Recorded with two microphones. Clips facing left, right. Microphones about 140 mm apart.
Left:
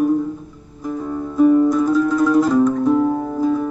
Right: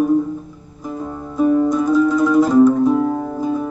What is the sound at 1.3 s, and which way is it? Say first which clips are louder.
Music: left 2 dB; centre (ahead or behind).